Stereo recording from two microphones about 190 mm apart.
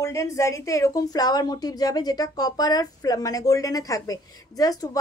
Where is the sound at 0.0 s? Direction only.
15° left (ahead or behind).